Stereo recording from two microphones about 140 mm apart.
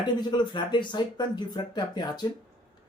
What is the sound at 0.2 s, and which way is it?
Speech, 30° left (ahead or behind).